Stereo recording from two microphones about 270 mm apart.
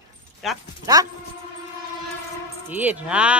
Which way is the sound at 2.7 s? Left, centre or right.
Centre.